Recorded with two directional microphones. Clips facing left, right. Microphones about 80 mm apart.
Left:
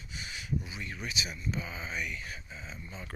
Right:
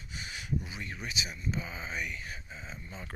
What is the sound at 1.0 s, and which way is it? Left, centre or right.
Speech, right.